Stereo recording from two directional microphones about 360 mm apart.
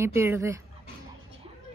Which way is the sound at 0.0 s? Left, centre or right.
Centre.